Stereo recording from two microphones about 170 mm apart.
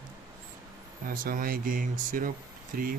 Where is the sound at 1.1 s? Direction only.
55° right (ahead or behind).